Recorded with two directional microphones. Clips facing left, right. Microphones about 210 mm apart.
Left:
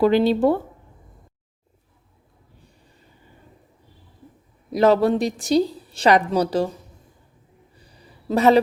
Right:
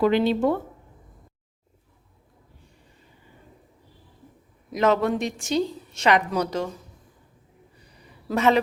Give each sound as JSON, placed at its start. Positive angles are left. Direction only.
{"t": 0.0, "sound": "a woman's voice", "side_deg": 35}
{"t": 4.7, "sound": "a woman's voice", "side_deg": 35}
{"t": 7.8, "sound": "a sound", "side_deg": 30}